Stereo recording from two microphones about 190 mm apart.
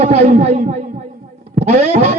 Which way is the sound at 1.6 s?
35° right (ahead or behind).